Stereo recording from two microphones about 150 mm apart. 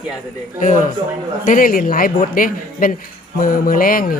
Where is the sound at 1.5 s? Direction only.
70° left (ahead or behind).